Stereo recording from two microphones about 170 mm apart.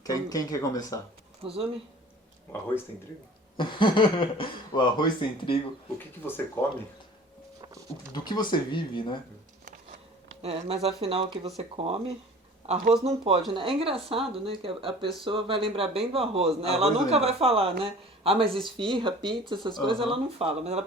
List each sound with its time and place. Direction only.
0.0 s speech: 20° left (ahead or behind)
1.4 s speech: 35° right (ahead or behind)
3.6 s speech: 30° left (ahead or behind)
6.2 s speech: 10° left (ahead or behind)
8.1 s speech: 25° left (ahead or behind)
10.4 s a man's voice: 35° right (ahead or behind)